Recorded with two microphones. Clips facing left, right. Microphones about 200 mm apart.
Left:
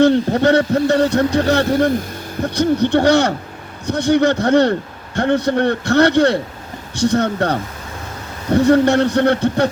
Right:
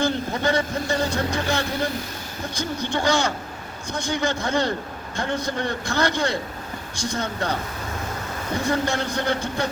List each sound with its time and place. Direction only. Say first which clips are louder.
0.0 s speech: left 11 dB; 65° left (ahead or behind)